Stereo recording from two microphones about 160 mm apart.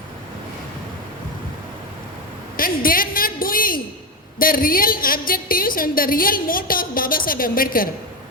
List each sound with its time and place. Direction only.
2.6 s a woman's voice: 60° left (ahead or behind)